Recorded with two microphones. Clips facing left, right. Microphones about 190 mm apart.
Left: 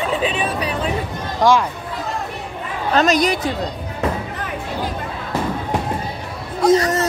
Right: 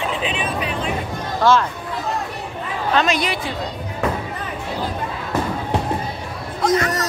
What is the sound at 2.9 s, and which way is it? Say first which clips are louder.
Speech: left 4 dB; 40° left (ahead or behind).